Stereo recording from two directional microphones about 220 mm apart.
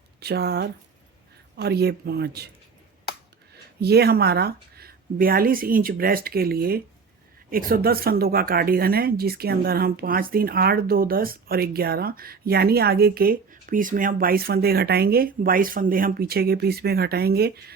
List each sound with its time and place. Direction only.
0.2 s a woman's voice: 45° right (ahead or behind)
3.5 s a woman's voice: 45° right (ahead or behind)